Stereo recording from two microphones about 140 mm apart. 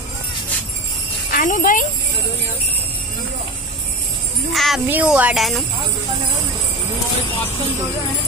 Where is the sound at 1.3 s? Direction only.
75° left (ahead or behind).